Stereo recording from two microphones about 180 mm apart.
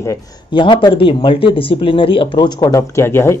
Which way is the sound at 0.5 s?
25° left (ahead or behind).